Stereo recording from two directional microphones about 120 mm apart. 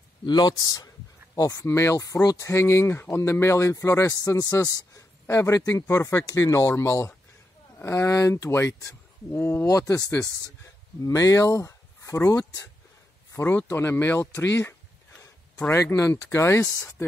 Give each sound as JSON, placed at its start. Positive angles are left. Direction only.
{"t": 0.2, "sound": "speech", "side_deg": 35}